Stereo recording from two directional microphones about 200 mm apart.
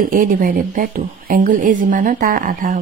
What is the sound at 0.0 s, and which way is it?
Speech, 45° right (ahead or behind).